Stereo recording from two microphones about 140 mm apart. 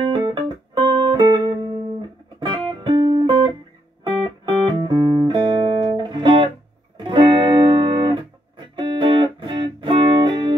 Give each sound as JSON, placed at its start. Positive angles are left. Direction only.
{"t": 0.1, "sound": "music", "side_deg": -35}